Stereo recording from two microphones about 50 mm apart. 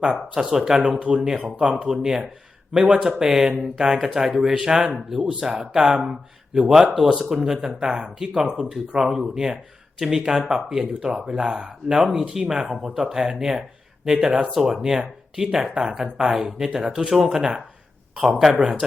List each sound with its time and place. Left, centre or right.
0.0 s speech: centre
0.8 s speech: right